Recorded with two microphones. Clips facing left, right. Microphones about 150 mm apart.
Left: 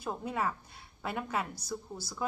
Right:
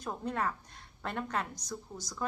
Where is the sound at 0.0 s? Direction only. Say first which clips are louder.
Left 1 dB; 5° left (ahead or behind).